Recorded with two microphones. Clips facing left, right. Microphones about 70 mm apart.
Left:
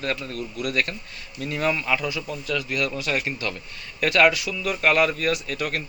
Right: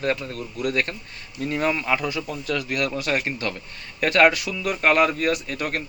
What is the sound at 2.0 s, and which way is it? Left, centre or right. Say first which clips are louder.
Speech: right 2 dB; right.